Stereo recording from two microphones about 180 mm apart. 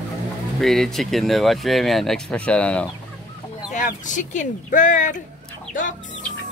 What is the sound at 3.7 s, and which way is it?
Speech, 45° left (ahead or behind).